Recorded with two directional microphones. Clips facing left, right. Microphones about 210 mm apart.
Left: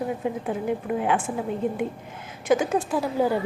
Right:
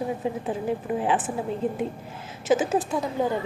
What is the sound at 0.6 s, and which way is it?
Speech, 30° right (ahead or behind).